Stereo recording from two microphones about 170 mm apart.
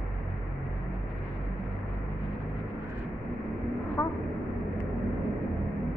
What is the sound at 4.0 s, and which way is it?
Vehicle, 20° left (ahead or behind).